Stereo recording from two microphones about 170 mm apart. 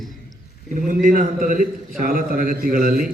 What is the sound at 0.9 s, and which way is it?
A man's voice, 50° right (ahead or behind).